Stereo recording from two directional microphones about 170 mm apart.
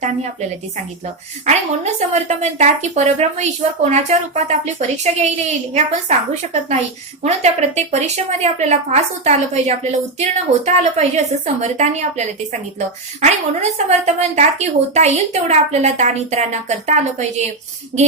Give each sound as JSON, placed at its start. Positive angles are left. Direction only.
{"t": 1.5, "sound": "a woman's voice", "side_deg": -40}